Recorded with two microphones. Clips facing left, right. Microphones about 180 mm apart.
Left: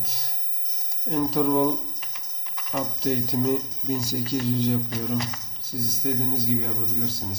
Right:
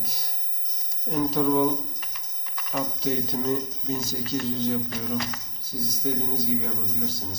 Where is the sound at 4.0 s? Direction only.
35° left (ahead or behind).